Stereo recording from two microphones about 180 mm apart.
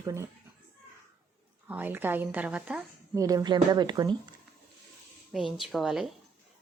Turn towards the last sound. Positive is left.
turn(degrees=0)  # may be behind; listen again after turning